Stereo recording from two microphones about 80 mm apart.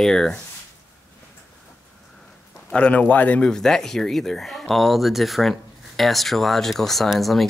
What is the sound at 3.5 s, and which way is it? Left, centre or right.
Speech, centre.